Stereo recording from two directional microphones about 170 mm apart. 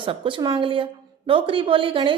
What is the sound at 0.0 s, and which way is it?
A woman's voice, 30° right (ahead or behind).